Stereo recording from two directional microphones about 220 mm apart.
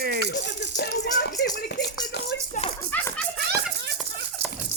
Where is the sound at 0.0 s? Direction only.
45° right (ahead or behind).